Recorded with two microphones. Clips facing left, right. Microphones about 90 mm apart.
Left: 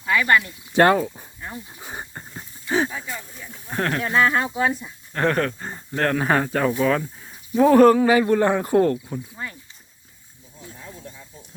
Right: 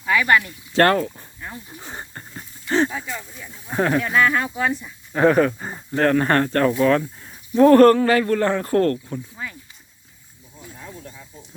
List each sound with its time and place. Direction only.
0.1 s speech: 15° right (ahead or behind)
0.4 s speech: 15° left (ahead or behind); by 4.0 s 5° right (ahead or behind)
4.0 s speech: 20° left (ahead or behind)
5.1 s speech: 5° right (ahead or behind)
10.6 s snake: 5° right (ahead or behind)